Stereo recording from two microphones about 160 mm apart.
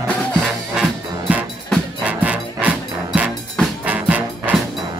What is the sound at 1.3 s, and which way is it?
Music, 10° right (ahead or behind).